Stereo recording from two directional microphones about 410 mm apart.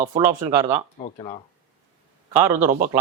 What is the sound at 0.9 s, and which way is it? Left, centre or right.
Speech, centre.